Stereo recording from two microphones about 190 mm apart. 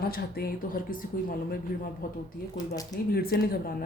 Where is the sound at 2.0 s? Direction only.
50° left (ahead or behind).